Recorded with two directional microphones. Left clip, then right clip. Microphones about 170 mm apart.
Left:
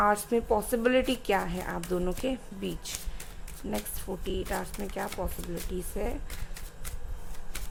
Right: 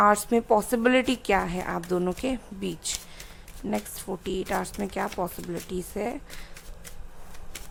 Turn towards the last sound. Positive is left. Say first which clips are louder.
# right 4 dB
turn(degrees=-20)  # may be behind; listen again after turning